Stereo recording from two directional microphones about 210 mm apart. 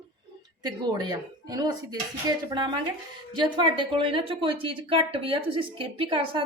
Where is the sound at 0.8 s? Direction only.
20° right (ahead or behind).